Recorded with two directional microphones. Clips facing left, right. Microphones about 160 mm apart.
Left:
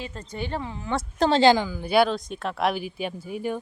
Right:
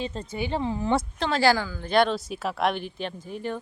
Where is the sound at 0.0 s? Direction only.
20° right (ahead or behind).